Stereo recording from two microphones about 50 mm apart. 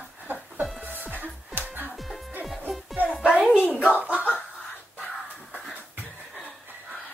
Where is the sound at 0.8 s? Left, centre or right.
Right.